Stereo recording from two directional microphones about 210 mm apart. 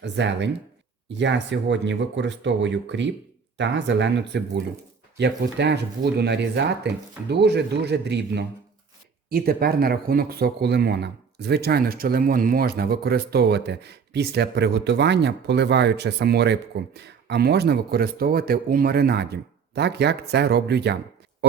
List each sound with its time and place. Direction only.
0.0 s speech: 55° right (ahead or behind)